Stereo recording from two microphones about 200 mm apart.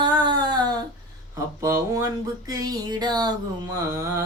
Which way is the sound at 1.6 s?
15° right (ahead or behind).